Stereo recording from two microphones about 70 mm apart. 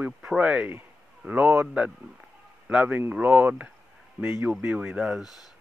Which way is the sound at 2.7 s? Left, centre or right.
Centre.